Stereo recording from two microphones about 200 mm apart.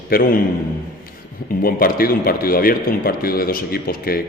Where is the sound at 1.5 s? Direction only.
45° left (ahead or behind).